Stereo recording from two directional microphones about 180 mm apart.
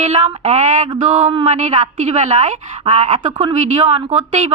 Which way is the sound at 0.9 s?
40° right (ahead or behind).